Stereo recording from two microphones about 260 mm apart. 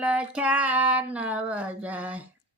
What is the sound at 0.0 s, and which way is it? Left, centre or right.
Speech, centre.